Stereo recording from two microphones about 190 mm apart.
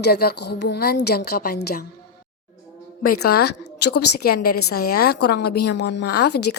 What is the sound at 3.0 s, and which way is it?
A woman's voice, 55° left (ahead or behind).